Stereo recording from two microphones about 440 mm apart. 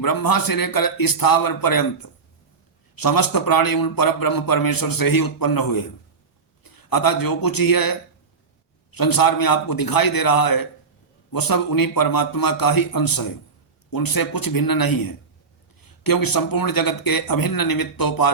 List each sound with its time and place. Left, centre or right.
0.0 s a man's voice: left